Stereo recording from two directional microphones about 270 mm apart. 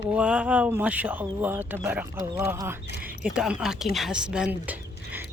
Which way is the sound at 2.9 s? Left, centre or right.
Right.